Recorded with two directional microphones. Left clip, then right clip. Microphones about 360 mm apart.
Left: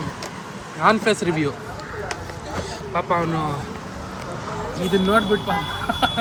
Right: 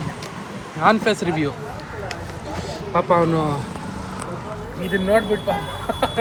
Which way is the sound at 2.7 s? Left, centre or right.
Centre.